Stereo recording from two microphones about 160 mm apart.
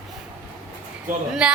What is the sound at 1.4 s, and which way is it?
Speech, 5° right (ahead or behind).